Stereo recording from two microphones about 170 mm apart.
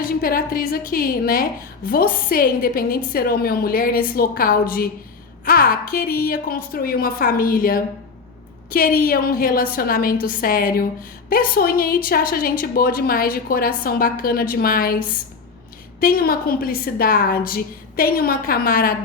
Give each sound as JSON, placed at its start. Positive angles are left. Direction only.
{"t": 0.2, "sound": "a woman's voice", "side_deg": 55}
{"t": 16.0, "sound": "a woman's voice", "side_deg": 60}